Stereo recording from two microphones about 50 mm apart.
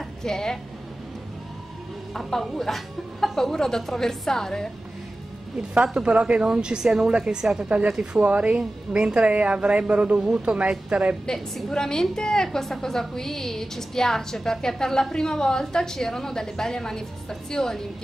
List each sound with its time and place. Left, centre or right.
0.2 s a woman's voice: centre
2.4 s a woman's voice: centre
5.8 s speech: right
8.2 s a woman's voice: right
11.7 s a woman's voice: centre